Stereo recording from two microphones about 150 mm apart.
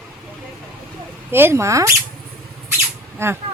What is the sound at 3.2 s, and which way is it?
Speech, 15° right (ahead or behind).